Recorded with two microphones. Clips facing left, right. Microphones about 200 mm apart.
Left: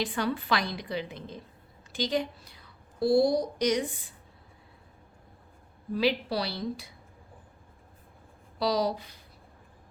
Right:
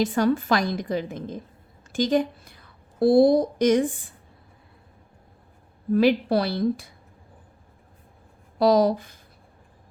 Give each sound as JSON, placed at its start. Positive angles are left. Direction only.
{"t": 0.0, "sound": "a woman's voice", "side_deg": -45}
{"t": 5.9, "sound": "a woman's voice", "side_deg": -50}
{"t": 8.5, "sound": "a woman's voice", "side_deg": -50}